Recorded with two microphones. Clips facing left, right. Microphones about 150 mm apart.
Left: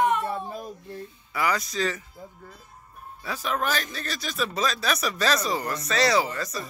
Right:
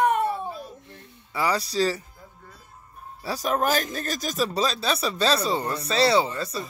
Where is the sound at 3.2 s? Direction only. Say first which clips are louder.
Right 4 dB; 35° right (ahead or behind).